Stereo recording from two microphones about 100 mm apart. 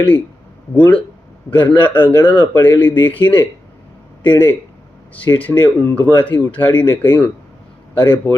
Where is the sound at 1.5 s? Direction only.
20° left (ahead or behind).